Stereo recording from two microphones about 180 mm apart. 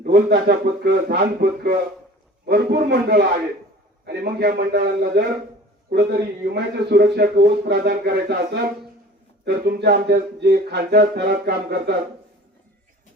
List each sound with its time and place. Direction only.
0.0 s a man's voice: 65° right (ahead or behind)